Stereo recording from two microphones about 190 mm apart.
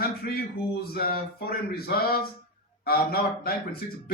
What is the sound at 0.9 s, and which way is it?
Speech, 50° left (ahead or behind).